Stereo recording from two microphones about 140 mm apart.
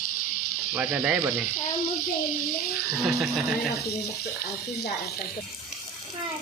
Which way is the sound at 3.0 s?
Centre (ahead or behind).